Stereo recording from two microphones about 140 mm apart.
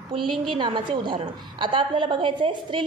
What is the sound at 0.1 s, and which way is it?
A woman's voice, 35° right (ahead or behind).